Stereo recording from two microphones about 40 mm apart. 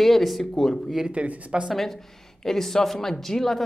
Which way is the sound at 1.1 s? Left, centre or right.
Right.